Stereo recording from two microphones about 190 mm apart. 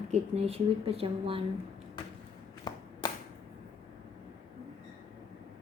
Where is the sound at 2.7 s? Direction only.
20° left (ahead or behind).